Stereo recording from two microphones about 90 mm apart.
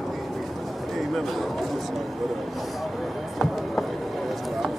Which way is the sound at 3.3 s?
Centre (ahead or behind).